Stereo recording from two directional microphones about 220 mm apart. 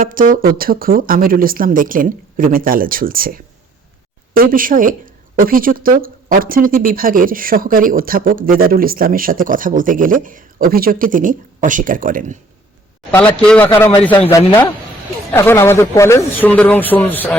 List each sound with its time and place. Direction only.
0.0 s speech: 40° right (ahead or behind)
13.1 s a man's voice: 5° left (ahead or behind)